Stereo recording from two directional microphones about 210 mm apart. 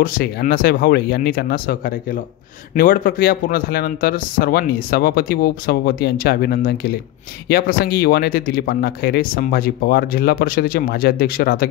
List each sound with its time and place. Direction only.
0.0 s a man's voice: 45° left (ahead or behind)